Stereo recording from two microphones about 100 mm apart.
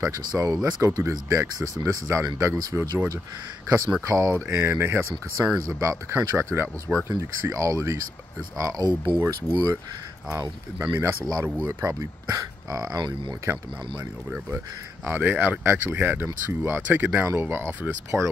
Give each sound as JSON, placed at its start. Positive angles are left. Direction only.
{"t": 0.3, "sound": "speech", "side_deg": -35}
{"t": 13.5, "sound": "speech", "side_deg": -20}